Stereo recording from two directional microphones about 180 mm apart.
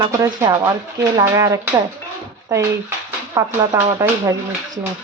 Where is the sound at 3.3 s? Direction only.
15° right (ahead or behind).